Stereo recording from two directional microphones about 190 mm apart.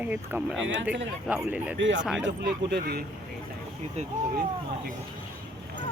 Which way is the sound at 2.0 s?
5° right (ahead or behind).